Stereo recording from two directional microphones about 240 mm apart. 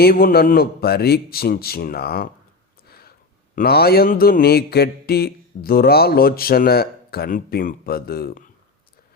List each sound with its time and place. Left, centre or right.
0.0 s mantra: left
3.5 s mantra: left